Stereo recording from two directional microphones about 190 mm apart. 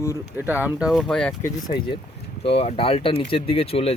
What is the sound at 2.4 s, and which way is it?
Speech, 30° left (ahead or behind).